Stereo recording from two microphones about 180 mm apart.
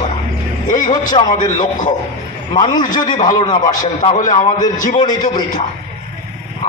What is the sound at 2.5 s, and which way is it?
A man's voice, 25° left (ahead or behind).